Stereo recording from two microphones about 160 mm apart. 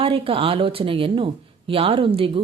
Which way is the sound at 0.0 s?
35° right (ahead or behind).